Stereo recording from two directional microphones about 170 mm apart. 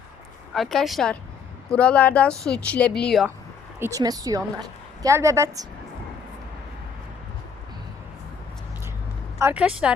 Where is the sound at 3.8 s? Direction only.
20° right (ahead or behind).